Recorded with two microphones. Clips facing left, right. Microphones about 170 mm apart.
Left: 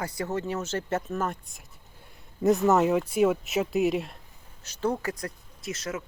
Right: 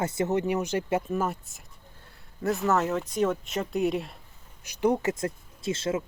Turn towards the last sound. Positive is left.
turn(degrees=-25)  # may be behind; listen again after turning